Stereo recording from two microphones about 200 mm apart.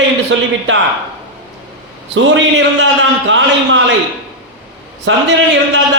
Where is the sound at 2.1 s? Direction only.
65° right (ahead or behind).